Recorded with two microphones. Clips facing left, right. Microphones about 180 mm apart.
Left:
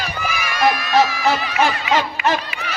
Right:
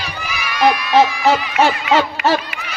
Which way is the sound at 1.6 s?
35° right (ahead or behind).